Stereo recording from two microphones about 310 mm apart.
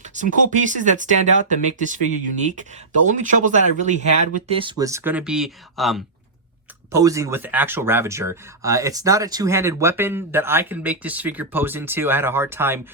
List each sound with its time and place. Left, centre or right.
0.0 s speech: right; by 12.9 s centre